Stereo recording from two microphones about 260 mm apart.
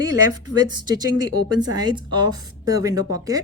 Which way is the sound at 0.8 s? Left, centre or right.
Centre.